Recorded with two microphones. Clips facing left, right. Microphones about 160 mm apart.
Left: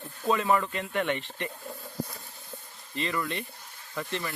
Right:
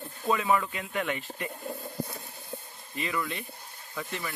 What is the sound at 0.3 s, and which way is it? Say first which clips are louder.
Speech: left 1 dB; centre (ahead or behind).